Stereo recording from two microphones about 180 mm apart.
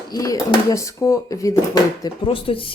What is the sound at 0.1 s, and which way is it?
Speech, 20° left (ahead or behind).